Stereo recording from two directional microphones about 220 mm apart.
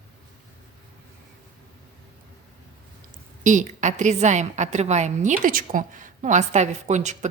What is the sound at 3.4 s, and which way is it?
Speech, 35° right (ahead or behind).